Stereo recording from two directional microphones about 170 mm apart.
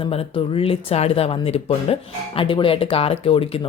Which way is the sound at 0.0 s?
35° left (ahead or behind).